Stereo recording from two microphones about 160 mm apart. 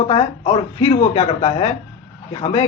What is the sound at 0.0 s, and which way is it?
A man's voice, 40° left (ahead or behind).